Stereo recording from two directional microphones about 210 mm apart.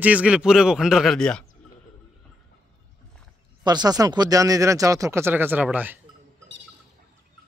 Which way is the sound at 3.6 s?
20° right (ahead or behind).